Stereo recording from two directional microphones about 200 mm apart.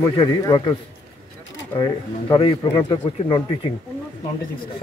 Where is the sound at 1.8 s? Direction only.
25° left (ahead or behind).